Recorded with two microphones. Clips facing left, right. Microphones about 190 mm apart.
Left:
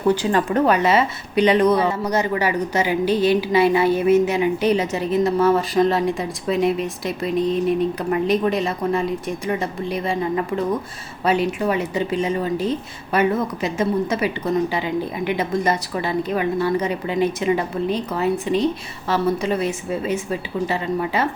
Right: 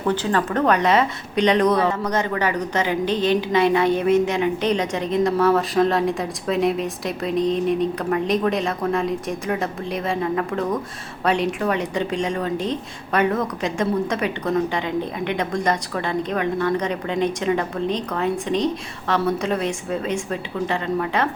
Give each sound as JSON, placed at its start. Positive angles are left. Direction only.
{"t": 0.1, "sound": "a woman's voice", "side_deg": 10}